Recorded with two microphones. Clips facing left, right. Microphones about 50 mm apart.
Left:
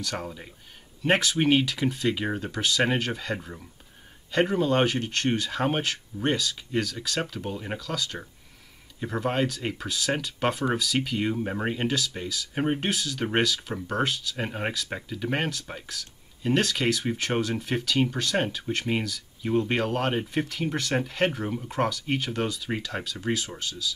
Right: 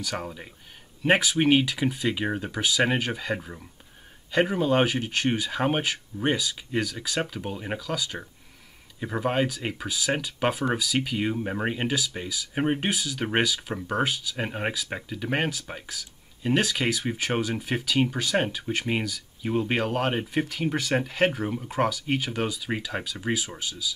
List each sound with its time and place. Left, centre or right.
0.0 s speech: centre